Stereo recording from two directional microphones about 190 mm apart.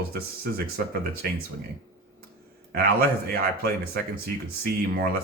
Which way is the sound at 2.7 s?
55° right (ahead or behind).